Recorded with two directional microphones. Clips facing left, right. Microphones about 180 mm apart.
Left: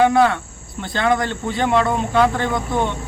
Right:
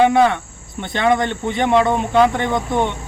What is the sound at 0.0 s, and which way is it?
Speech, 20° right (ahead or behind).